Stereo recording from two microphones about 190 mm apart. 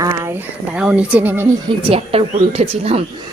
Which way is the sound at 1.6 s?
30° right (ahead or behind).